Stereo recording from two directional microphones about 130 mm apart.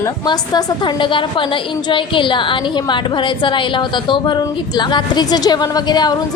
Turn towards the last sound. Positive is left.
turn(degrees=30)  # may be behind; listen again after turning